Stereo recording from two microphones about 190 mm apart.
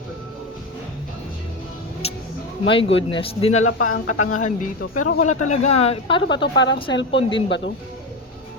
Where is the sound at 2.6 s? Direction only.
25° left (ahead or behind).